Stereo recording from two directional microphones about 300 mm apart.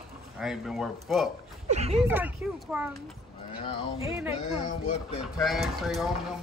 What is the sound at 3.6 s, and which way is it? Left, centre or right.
Speech, centre.